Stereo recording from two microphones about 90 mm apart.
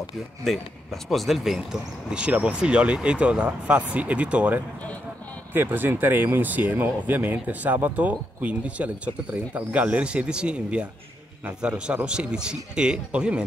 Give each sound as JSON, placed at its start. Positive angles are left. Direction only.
{"t": 0.4, "sound": "speech", "side_deg": 5}